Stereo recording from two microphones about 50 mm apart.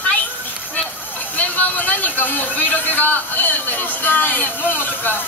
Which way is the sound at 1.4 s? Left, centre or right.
Left.